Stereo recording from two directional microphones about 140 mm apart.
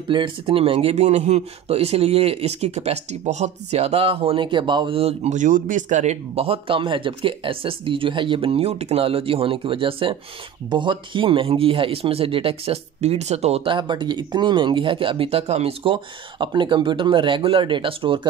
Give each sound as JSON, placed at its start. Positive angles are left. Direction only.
{"t": 0.1, "sound": "speech", "side_deg": -40}